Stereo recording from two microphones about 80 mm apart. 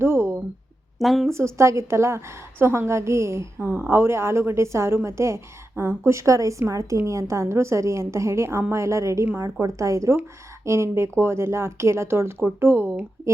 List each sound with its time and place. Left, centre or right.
0.0 s a sound: right
0.9 s a woman's voice: centre
1.3 s a woman's voice: right